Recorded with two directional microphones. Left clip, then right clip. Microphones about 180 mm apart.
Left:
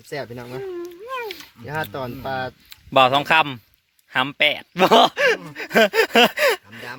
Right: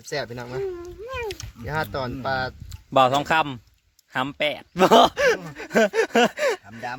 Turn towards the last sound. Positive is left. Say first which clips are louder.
# left 5 dB
turn(degrees=10)  # may be behind; listen again after turning